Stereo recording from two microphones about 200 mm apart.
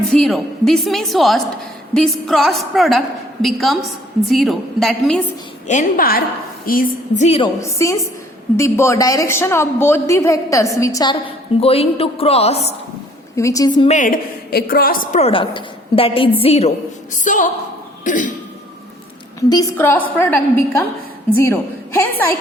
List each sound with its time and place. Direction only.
0.1 s a woman's voice: 5° left (ahead or behind)
5.6 s a woman's voice: 40° left (ahead or behind)
7.3 s a woman's voice: 30° left (ahead or behind)
7.6 s a man's voice: 15° left (ahead or behind)
11.6 s a woman's voice: 30° left (ahead or behind)
13.3 s a man's voice: 15° left (ahead or behind)
13.9 s a woman's voice: 40° left (ahead or behind)
15.2 s a woman's voice: 25° left (ahead or behind)
19.4 s a man's voice: 15° left (ahead or behind)